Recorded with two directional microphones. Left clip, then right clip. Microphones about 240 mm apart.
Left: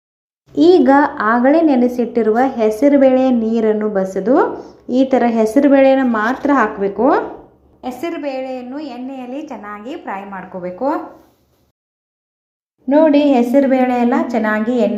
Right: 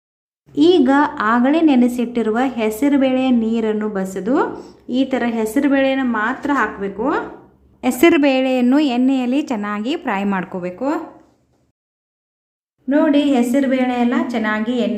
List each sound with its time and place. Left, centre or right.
0.5 s a woman's voice: centre
8.2 s a woman's voice: right
10.5 s speech: right
12.9 s speech: centre